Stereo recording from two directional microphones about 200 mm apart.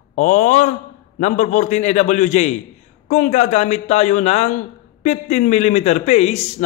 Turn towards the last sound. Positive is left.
turn(degrees=35)  # may be behind; listen again after turning